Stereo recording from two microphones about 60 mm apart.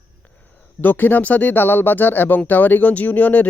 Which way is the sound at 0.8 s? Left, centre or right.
Left.